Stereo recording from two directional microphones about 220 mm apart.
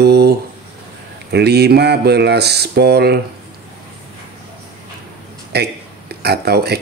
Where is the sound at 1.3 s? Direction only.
50° right (ahead or behind).